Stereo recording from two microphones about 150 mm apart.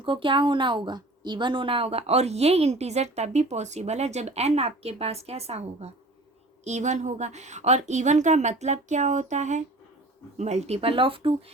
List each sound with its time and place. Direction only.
0.0 s a woman's voice: 35° right (ahead or behind)